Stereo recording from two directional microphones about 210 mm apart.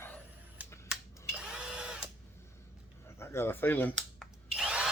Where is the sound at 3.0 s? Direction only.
10° left (ahead or behind).